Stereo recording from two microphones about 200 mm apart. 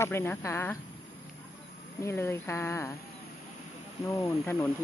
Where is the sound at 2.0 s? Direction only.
15° left (ahead or behind).